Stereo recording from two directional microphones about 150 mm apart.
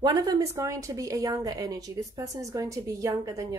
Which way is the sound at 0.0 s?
25° right (ahead or behind).